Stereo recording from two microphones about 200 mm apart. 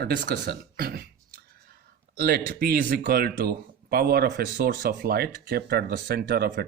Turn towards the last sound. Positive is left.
turn(degrees=-50)  # may be behind; listen again after turning